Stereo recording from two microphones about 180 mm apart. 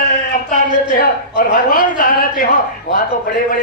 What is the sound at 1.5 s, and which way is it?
A man's voice, 50° left (ahead or behind).